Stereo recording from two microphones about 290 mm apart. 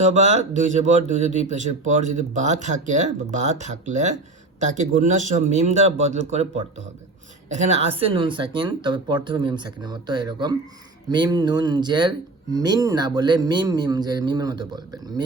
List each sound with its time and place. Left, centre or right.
0.0 s speech: right